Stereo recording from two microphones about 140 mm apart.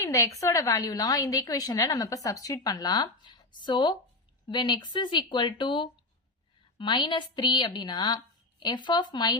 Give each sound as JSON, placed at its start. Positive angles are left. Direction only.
{"t": 0.0, "sound": "a woman's voice", "side_deg": 20}